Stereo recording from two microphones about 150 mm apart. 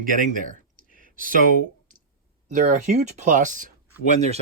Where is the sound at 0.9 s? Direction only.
65° right (ahead or behind).